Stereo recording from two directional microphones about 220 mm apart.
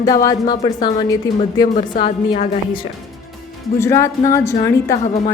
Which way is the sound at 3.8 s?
15° left (ahead or behind).